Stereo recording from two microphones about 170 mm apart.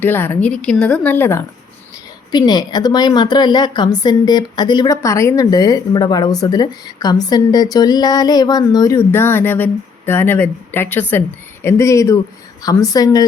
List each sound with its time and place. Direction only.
0.0 s speech: 10° left (ahead or behind)
2.3 s a woman's voice: 25° left (ahead or behind)